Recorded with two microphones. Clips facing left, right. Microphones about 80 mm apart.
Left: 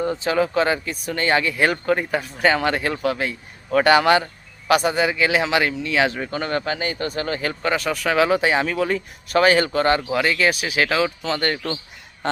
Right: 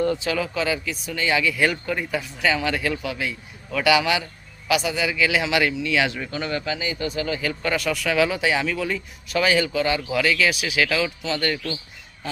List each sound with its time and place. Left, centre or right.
0.2 s speech: left
10.1 s speech: left